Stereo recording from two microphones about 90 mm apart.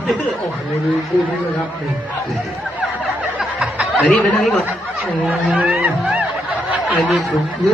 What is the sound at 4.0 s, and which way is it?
Speech, 15° left (ahead or behind).